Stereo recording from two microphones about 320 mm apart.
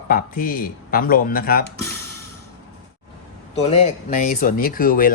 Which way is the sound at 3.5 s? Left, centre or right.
Centre.